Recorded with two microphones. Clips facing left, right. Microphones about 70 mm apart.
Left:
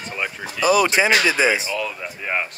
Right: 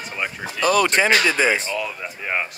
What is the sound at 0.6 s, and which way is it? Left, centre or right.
Speech, centre.